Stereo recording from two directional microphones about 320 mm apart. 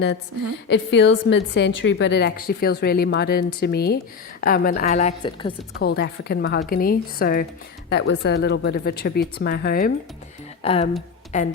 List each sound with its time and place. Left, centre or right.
0.7 s a woman's voice: left; by 5.5 s centre
5.8 s a woman's voice: left